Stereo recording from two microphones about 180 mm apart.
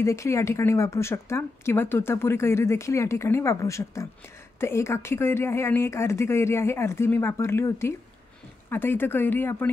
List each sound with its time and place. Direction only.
0.0 s speech: 15° left (ahead or behind)